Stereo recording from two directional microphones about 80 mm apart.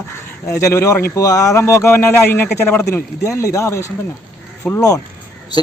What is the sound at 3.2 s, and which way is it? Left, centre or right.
Speech, left.